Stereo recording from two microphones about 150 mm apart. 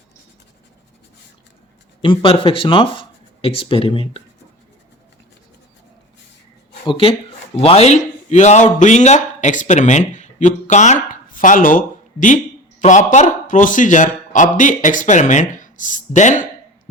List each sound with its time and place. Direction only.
2.0 s speech: 35° left (ahead or behind)
6.8 s a man's voice: 35° left (ahead or behind); by 16.5 s 55° left (ahead or behind)